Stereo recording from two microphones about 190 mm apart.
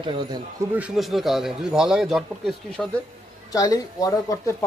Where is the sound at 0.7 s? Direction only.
5° right (ahead or behind).